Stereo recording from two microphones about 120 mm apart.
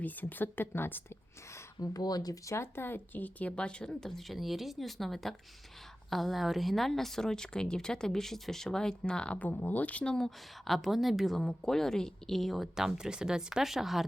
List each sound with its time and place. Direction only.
0.0 s speech: 15° left (ahead or behind)
1.8 s speech: 30° left (ahead or behind); by 14.0 s centre (ahead or behind)